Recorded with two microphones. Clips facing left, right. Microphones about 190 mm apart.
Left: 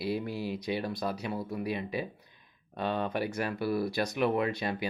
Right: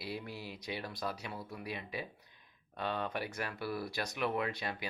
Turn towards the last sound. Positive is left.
turn(degrees=25)  # may be behind; listen again after turning